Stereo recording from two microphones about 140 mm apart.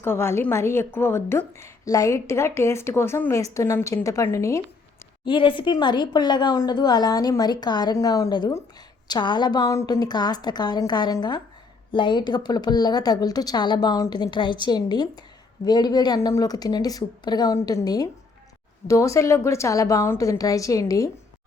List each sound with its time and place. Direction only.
0.0 s a woman's voice: 15° left (ahead or behind)
5.2 s a woman's voice: 35° left (ahead or behind)